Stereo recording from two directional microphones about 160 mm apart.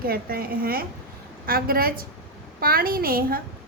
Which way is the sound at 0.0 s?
70° right (ahead or behind).